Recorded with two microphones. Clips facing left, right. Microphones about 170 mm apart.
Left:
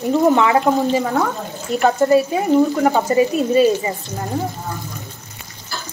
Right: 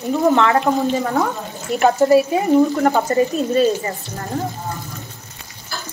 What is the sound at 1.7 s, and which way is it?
Speech, 5° right (ahead or behind).